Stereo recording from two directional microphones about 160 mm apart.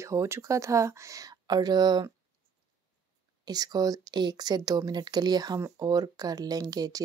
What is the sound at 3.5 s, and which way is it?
Speech, 25° right (ahead or behind).